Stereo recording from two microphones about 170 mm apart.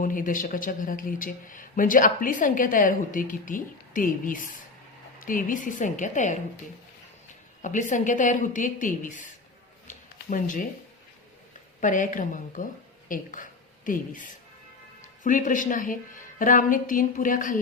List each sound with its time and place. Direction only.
0.0 s speech: 55° left (ahead or behind)
7.6 s speech: 50° left (ahead or behind)
11.8 s speech: 50° left (ahead or behind)